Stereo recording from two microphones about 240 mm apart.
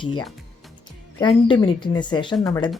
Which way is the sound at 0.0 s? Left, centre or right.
Centre.